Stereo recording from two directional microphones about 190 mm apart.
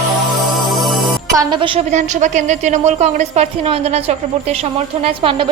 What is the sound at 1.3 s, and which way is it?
A woman's voice, 25° right (ahead or behind).